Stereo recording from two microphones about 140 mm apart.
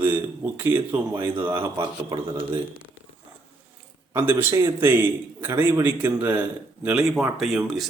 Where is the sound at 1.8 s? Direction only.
30° right (ahead or behind).